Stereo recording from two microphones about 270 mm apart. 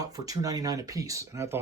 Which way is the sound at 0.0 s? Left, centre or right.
Centre.